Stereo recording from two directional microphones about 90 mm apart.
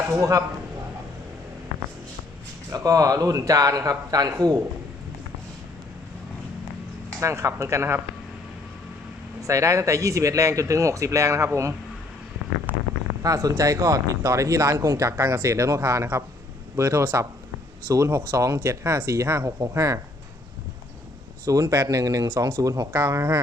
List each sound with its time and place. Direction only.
0.2 s speech: 35° right (ahead or behind)
2.7 s speech: 40° right (ahead or behind)
7.2 s speech: 30° right (ahead or behind)
9.4 s speech: 35° right (ahead or behind)
13.2 s speech: 35° right (ahead or behind)
21.4 s speech: 40° right (ahead or behind)